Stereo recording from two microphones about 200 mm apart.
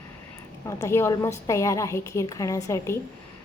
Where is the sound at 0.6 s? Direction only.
15° left (ahead or behind).